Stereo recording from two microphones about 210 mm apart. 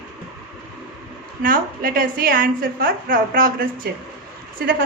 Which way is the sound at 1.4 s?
40° right (ahead or behind).